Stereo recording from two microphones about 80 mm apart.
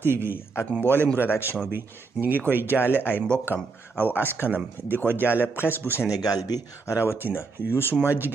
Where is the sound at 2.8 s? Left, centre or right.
Left.